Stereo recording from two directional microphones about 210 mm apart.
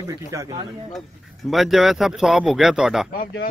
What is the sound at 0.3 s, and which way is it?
Speech, 15° right (ahead or behind).